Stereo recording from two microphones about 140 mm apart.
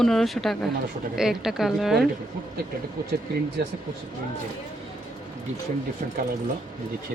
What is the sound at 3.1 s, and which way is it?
Speech, 90° right.